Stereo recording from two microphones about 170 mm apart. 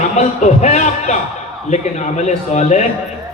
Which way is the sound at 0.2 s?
45° left (ahead or behind).